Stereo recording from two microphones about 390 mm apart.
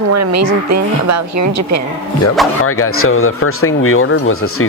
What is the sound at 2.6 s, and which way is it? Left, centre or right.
Speech, left.